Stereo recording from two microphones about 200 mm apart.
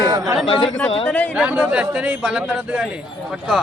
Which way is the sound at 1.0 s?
5° left (ahead or behind).